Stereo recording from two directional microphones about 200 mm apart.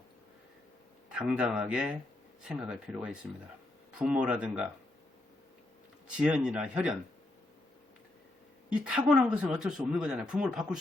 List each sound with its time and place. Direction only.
1.1 s speech: 5° right (ahead or behind)
6.1 s speech: 5° right (ahead or behind)
8.7 s speech: 5° right (ahead or behind)